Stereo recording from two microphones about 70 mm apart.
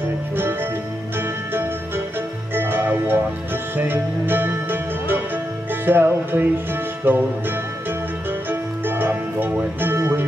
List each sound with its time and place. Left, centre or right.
2.5 s music: right
8.5 s music: right